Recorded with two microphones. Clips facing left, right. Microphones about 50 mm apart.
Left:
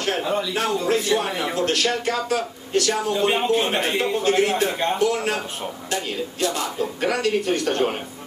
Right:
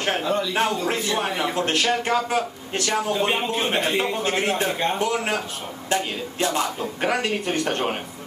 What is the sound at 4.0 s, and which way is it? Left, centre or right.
Speech, right.